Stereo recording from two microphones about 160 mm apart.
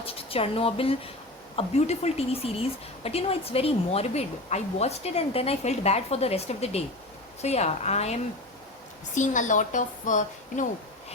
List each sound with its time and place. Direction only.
0.0 s a woman's voice: 35° left (ahead or behind); by 10.7 s 50° left (ahead or behind)